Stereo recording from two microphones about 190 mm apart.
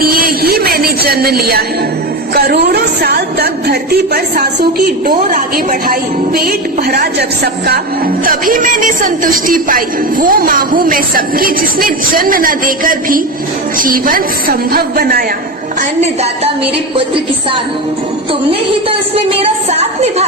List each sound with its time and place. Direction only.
0.0 s a sound: 50° right (ahead or behind)
2.3 s a woman's voice: 55° right (ahead or behind)
5.9 s music: 50° right (ahead or behind)
18.9 s a woman's voice: 30° right (ahead or behind)